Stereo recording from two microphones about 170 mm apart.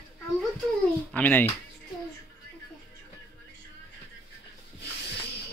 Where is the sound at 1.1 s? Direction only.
10° left (ahead or behind).